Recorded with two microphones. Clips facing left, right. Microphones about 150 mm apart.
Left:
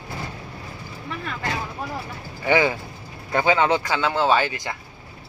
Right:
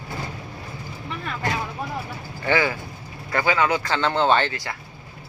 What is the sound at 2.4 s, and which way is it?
Speech, 20° left (ahead or behind).